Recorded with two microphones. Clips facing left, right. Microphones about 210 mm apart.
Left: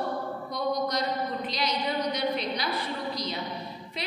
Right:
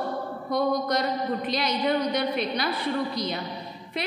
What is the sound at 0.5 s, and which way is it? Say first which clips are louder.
A woman's voice: right 5 dB; 55° right (ahead or behind).